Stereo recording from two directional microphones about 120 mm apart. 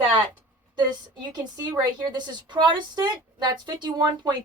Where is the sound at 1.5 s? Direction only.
35° right (ahead or behind).